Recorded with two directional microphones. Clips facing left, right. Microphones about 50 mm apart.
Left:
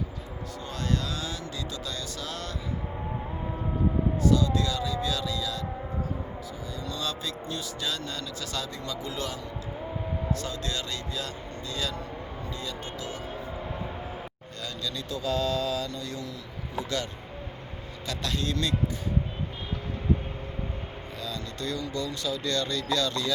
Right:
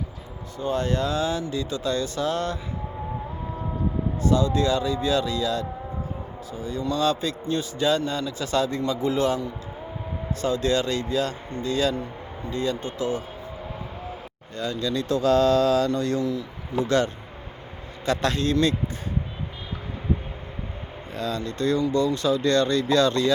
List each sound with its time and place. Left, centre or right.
0.6 s speech: right
4.2 s speech: right
14.6 s speech: right
15.1 s mantra: right
16.0 s speech: right
21.2 s speech: right